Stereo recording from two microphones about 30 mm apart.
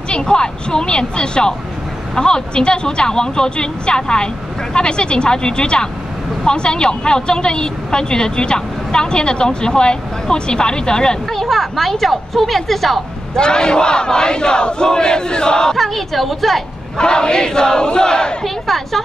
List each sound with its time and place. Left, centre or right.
0.1 s a woman's voice: left
11.3 s a woman's voice: centre
13.4 s a woman's voice: left
15.7 s a woman's voice: centre
17.0 s a woman's voice: left
18.4 s speech: centre